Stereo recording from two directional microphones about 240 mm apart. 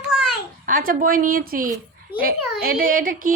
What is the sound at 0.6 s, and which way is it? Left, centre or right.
A woman's voice, right.